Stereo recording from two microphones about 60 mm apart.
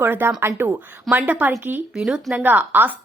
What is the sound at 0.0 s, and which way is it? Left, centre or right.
Speech, right.